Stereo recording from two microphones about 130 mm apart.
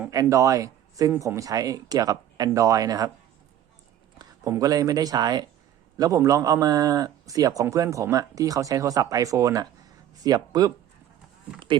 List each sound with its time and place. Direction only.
0.1 s a man's voice: 25° right (ahead or behind)
4.2 s a man's voice: 25° right (ahead or behind)
11.7 s speech: 40° right (ahead or behind)